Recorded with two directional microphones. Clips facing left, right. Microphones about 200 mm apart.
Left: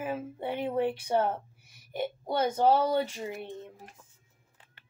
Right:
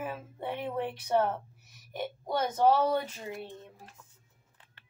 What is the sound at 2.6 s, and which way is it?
Speech, 10° left (ahead or behind).